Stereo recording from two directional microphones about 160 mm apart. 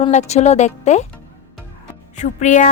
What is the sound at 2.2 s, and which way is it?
Speech, 50° left (ahead or behind).